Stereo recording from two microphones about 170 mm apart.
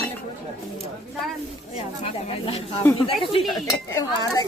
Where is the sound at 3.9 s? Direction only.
20° left (ahead or behind).